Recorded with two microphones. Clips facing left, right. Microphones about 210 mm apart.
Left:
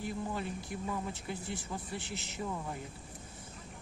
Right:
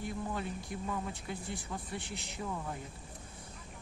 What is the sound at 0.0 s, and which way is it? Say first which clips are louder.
Speech: left 1 dB; centre (ahead or behind).